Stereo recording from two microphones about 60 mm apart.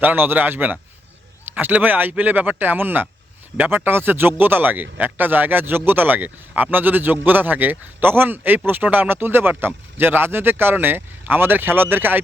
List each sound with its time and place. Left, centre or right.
0.0 s a man's voice: right